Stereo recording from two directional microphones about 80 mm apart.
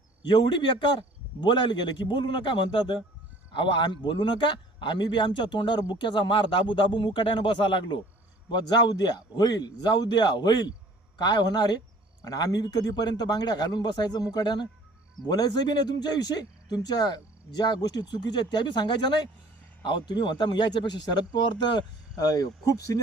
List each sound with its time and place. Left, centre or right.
0.3 s a man's voice: left
8.4 s speech: left
12.2 s speech: left